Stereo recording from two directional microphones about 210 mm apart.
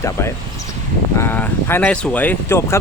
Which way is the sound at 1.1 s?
10° left (ahead or behind).